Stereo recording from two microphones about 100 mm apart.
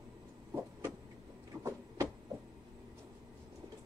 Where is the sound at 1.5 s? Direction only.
30° right (ahead or behind).